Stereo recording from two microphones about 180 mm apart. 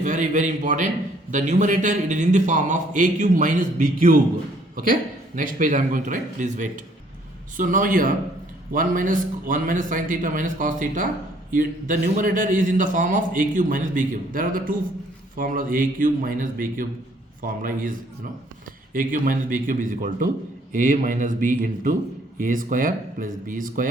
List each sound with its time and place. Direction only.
0.0 s a man's voice: 45° right (ahead or behind)
18.9 s a man's voice: 50° right (ahead or behind)